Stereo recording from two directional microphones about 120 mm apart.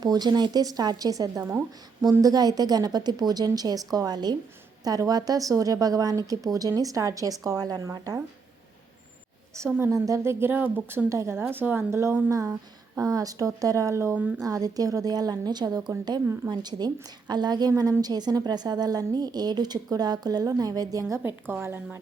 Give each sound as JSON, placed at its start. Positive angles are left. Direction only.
{"t": 0.0, "sound": "a woman's voice", "side_deg": -35}
{"t": 9.6, "sound": "a woman's voice", "side_deg": -20}